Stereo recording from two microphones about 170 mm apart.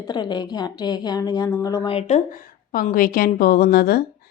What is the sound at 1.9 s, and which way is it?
Speech, 40° left (ahead or behind).